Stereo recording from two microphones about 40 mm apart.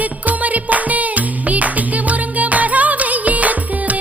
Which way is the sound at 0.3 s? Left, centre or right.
Right.